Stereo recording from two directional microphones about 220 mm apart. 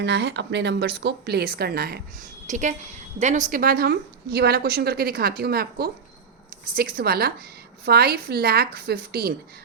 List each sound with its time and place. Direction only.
0.0 s a woman's voice: 50° right (ahead or behind)
2.5 s a woman's voice: 35° right (ahead or behind)